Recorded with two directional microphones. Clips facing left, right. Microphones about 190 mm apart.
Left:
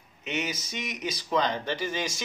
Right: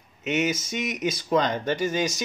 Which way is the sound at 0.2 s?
50° right (ahead or behind).